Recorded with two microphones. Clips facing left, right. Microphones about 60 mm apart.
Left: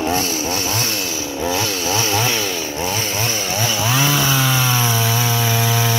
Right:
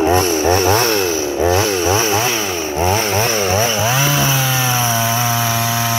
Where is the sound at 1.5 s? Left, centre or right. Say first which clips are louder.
Right 5 dB; centre.